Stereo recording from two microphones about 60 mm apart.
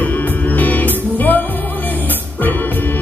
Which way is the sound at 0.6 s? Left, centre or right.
Left.